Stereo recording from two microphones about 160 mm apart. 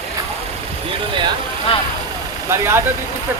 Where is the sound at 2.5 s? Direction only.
15° right (ahead or behind).